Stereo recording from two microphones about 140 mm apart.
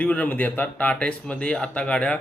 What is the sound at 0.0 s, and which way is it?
Speech, 10° left (ahead or behind).